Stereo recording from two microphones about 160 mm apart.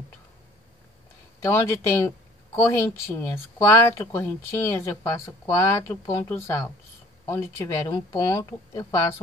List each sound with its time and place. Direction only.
1.4 s speech: 20° left (ahead or behind)